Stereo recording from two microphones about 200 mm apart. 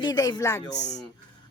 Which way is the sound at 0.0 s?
20° left (ahead or behind).